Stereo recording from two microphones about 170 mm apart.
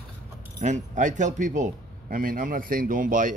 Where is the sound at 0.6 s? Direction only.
45° right (ahead or behind).